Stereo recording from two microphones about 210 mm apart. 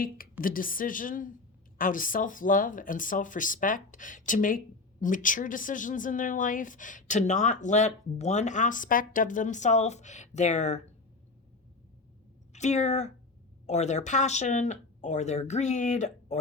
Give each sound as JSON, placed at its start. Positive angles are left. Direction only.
{"t": 0.4, "sound": "speech", "side_deg": 40}
{"t": 12.5, "sound": "speech", "side_deg": 35}